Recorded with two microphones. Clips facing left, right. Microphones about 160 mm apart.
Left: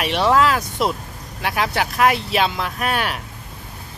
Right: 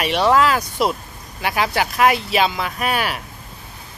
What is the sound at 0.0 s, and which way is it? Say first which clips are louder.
Speech: right 1 dB; centre (ahead or behind).